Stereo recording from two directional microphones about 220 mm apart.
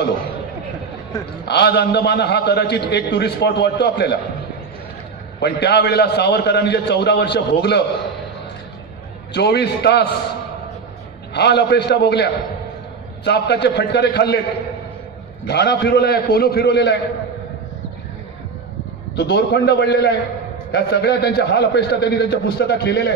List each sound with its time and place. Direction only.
1.5 s a man's voice: 50° left (ahead or behind)
5.4 s a man's voice: 50° left (ahead or behind)
9.3 s a man's voice: 50° left (ahead or behind)
11.3 s a man's voice: 50° left (ahead or behind)
15.4 s a man's voice: 45° left (ahead or behind)
19.1 s a man's voice: 50° left (ahead or behind)